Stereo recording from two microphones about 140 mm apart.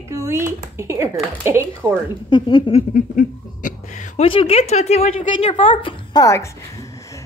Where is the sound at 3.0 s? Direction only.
70° left (ahead or behind).